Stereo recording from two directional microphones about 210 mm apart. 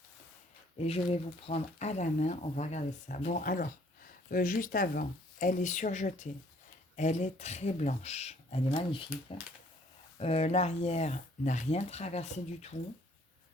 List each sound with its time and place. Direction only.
0.8 s speech: 30° left (ahead or behind)
10.2 s speech: 30° left (ahead or behind)